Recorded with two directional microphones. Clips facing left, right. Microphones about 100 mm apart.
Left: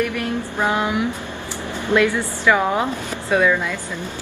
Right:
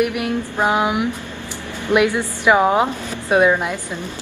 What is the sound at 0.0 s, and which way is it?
A woman's voice, 15° right (ahead or behind).